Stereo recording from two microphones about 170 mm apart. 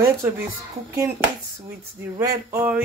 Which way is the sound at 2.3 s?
15° right (ahead or behind).